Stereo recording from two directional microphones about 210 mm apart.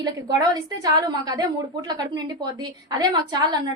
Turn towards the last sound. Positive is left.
turn(degrees=-20)  # may be behind; listen again after turning